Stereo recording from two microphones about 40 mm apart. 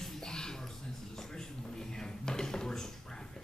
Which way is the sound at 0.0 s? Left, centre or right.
Centre.